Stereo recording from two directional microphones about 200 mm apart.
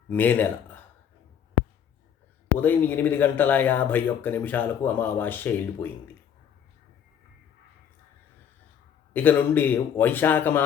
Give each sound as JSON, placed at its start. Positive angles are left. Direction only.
{"t": 0.1, "sound": "speech", "side_deg": 10}
{"t": 2.6, "sound": "speech", "side_deg": 10}
{"t": 9.1, "sound": "speech", "side_deg": 10}